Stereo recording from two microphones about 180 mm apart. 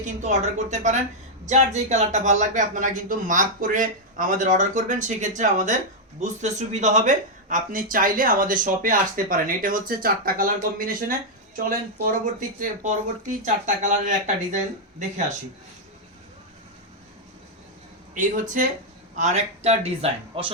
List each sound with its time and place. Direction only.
0.0 s a man's voice: 40° right (ahead or behind)
18.1 s a man's voice: 45° right (ahead or behind)